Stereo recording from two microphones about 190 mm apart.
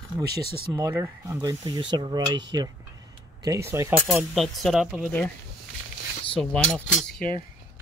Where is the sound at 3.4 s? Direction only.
15° right (ahead or behind).